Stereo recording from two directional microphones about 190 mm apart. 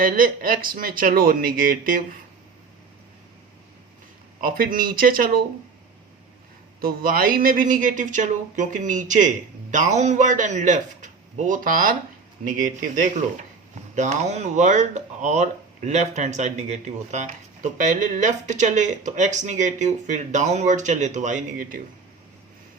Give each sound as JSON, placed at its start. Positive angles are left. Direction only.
{"t": 0.0, "sound": "speech", "side_deg": -50}
{"t": 4.4, "sound": "speech", "side_deg": -50}
{"t": 6.8, "sound": "speech", "side_deg": -50}